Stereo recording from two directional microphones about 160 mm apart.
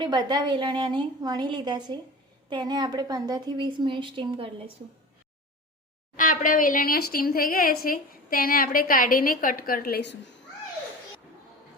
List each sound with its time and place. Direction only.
0.0 s speech: 25° right (ahead or behind)
6.1 s a woman's voice: 55° left (ahead or behind); by 10.2 s 80° left